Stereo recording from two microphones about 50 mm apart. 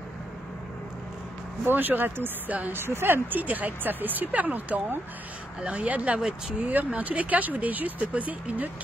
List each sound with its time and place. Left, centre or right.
1.7 s speech: right
2.7 s speech: right